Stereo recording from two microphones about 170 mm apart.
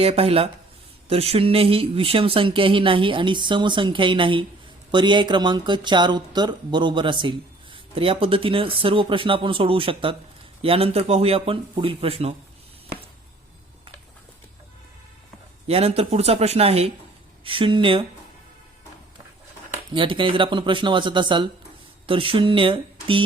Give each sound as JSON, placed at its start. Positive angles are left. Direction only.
{"t": 0.0, "sound": "speech", "side_deg": -35}
{"t": 15.6, "sound": "speech", "side_deg": -35}
{"t": 19.9, "sound": "speech", "side_deg": -30}